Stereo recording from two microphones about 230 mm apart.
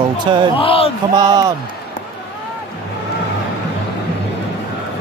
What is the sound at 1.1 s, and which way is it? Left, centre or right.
Speech, centre.